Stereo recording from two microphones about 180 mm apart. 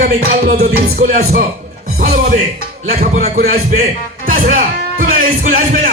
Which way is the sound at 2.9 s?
55° right (ahead or behind).